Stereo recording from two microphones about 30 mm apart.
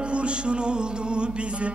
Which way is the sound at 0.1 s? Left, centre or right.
Right.